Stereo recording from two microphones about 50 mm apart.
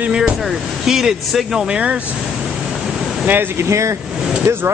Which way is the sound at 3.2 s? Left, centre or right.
Right.